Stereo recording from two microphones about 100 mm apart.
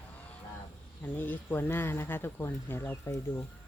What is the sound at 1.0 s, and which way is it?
Speech, 20° left (ahead or behind).